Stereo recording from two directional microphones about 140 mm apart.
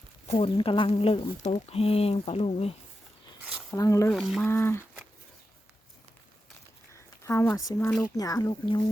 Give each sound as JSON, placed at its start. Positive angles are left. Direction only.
{"t": 0.3, "sound": "speech", "side_deg": 40}
{"t": 3.7, "sound": "speech", "side_deg": 25}
{"t": 4.1, "sound": "speech", "side_deg": 0}
{"t": 4.4, "sound": "speech", "side_deg": 15}
{"t": 6.9, "sound": "a sound", "side_deg": 20}
{"t": 8.1, "sound": "speech", "side_deg": 25}